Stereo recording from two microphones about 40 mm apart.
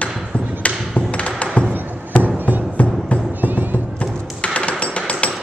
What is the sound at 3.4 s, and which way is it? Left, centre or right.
Music, right.